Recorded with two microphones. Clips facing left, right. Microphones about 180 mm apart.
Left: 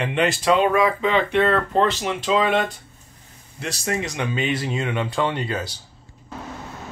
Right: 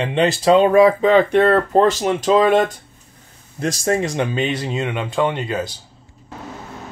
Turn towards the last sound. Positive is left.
turn(degrees=-20)  # may be behind; listen again after turning